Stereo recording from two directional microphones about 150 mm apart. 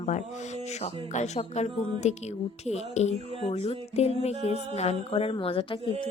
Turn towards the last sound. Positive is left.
turn(degrees=35)  # may be behind; listen again after turning